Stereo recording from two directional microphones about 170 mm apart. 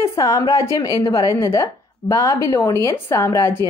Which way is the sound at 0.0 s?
20° left (ahead or behind).